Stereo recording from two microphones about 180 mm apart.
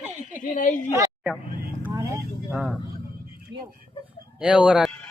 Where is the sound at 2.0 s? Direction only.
15° right (ahead or behind).